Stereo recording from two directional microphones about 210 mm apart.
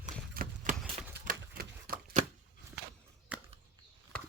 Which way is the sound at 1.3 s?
45° right (ahead or behind).